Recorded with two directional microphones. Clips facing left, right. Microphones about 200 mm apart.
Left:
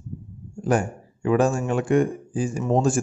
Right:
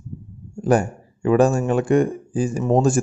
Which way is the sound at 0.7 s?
40° right (ahead or behind).